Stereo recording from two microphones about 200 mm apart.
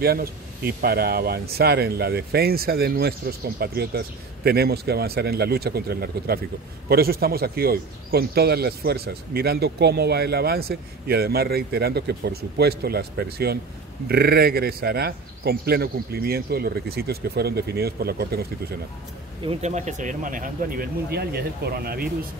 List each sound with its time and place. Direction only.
0.0 s speech: 50° right (ahead or behind)
19.4 s speech: 35° right (ahead or behind)